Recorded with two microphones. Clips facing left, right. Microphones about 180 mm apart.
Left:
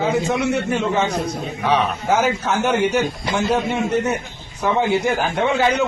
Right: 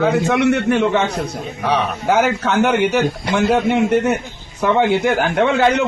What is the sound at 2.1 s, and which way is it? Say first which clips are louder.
A man's voice: right 4 dB; 65° right (ahead or behind).